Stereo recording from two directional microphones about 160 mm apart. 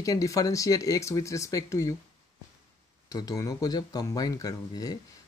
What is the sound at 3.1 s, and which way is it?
Speech, 20° left (ahead or behind).